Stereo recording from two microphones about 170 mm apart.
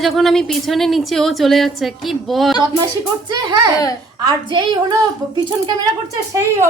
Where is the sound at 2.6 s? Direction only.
25° right (ahead or behind).